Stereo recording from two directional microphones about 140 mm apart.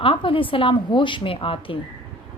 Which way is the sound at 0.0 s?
40° left (ahead or behind).